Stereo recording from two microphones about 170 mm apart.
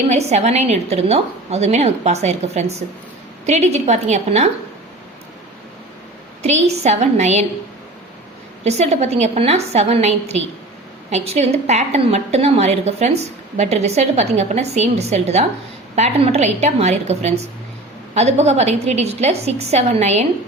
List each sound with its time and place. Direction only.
0.1 s a woman's voice: 40° right (ahead or behind)
6.4 s a woman's voice: 40° right (ahead or behind)
8.6 s a woman's voice: 40° right (ahead or behind)